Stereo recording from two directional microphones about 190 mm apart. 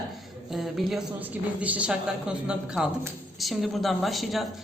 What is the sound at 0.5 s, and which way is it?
A woman's voice, centre (ahead or behind).